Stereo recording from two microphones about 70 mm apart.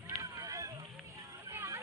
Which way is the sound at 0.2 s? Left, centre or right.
Right.